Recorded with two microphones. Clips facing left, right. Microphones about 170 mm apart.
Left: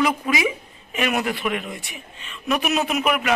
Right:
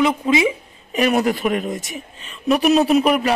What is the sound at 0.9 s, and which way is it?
A woman's voice, 35° right (ahead or behind).